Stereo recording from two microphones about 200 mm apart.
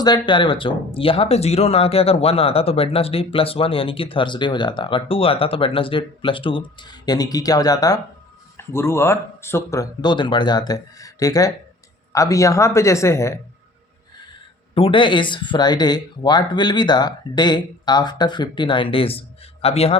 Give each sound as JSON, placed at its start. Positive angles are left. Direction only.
{"t": 0.0, "sound": "speech", "side_deg": 20}
{"t": 14.8, "sound": "speech", "side_deg": 25}